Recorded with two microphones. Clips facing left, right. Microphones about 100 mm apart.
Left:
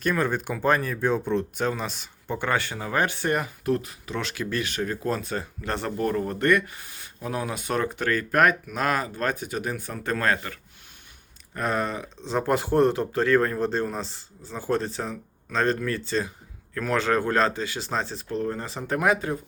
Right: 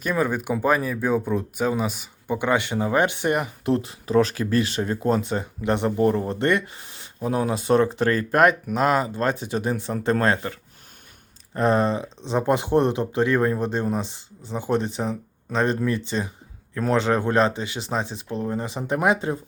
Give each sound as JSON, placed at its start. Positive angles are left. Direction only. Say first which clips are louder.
{"t": 0.0, "sound": "speech", "louder": "right 1 dB", "side_deg": -10}